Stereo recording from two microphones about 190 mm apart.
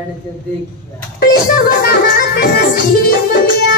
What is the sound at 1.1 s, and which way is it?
Music, 50° left (ahead or behind).